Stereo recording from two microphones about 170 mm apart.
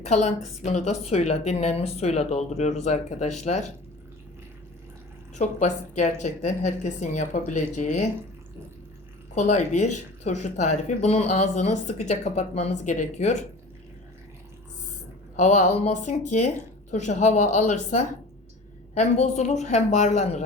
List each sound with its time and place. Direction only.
0.0 s speech: 45° left (ahead or behind)
5.3 s speech: 45° left (ahead or behind)
9.3 s speech: 40° left (ahead or behind)
15.4 s speech: 45° left (ahead or behind)